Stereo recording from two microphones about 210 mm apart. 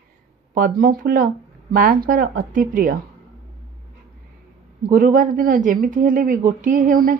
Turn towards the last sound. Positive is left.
turn(degrees=-40)  # may be behind; listen again after turning